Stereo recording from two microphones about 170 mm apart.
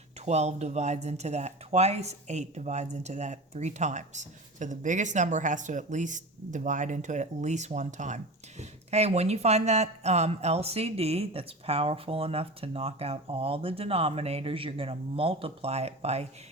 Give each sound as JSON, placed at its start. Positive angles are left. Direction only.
{"t": 0.3, "sound": "speech", "side_deg": -40}